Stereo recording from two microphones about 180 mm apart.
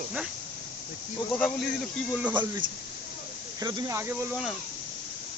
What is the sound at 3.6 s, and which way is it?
Speech, 20° right (ahead or behind).